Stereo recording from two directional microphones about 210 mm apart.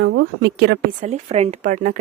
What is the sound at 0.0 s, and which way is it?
Speech, 65° right (ahead or behind).